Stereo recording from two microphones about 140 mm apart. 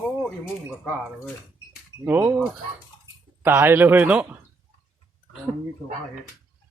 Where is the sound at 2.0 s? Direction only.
15° right (ahead or behind).